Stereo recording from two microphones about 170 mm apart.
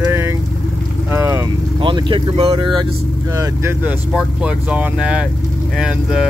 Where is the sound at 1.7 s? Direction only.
30° right (ahead or behind).